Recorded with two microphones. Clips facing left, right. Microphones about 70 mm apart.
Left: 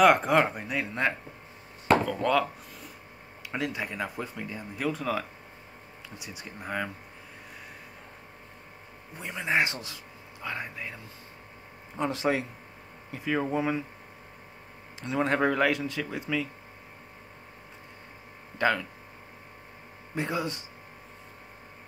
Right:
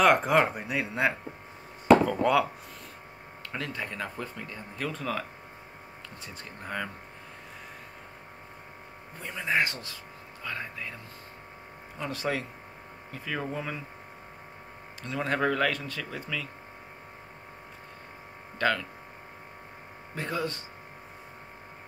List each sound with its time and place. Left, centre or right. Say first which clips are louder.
0.0 s speech: left 1 dB; centre
3.5 s speech: left 3 dB; centre
9.2 s speech: left 1 dB; centre
12.0 s speech: left 4 dB; left
15.0 s speech: left 3 dB; centre
18.6 s speech: left 1 dB; centre
20.2 s speech: left 1 dB; centre